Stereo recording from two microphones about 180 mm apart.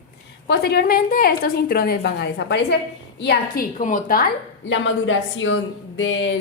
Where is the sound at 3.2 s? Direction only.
60° left (ahead or behind).